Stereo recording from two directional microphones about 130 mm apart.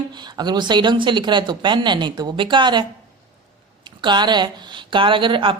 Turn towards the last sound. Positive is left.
turn(degrees=-40)  # may be behind; listen again after turning